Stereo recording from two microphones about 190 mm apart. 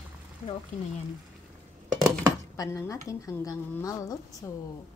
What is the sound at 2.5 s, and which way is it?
Speech, 15° left (ahead or behind).